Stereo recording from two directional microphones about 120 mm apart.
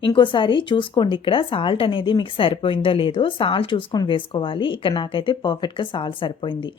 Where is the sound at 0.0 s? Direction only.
40° left (ahead or behind).